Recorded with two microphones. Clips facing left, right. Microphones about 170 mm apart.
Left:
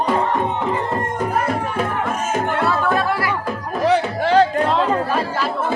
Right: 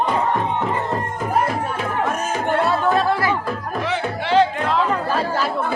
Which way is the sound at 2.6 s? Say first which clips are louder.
Right 1 dB; 25° right (ahead or behind).